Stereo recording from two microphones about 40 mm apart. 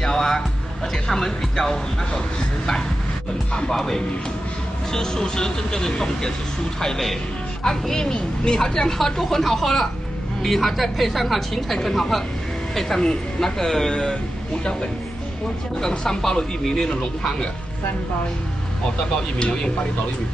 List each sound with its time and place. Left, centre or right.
0.0 s music: centre
1.1 s a woman's voice: centre
6.8 s a woman's voice: centre
7.6 s a woman's voice: centre
13.0 s a woman's voice: centre
14.6 s speech: left
16.0 s a woman's voice: centre
19.3 s speech: left